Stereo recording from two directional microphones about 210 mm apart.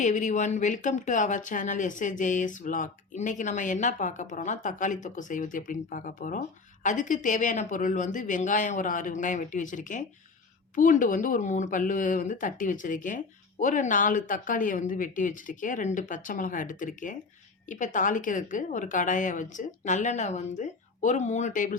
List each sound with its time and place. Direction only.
0.0 s speech: 35° left (ahead or behind)